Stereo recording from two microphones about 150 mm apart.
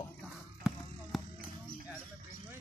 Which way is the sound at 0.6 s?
5° right (ahead or behind).